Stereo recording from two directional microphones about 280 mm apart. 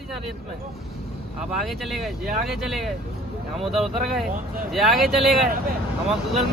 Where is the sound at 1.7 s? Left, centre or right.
Centre.